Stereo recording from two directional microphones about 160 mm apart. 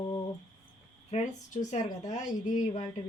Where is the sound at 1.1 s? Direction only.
45° left (ahead or behind).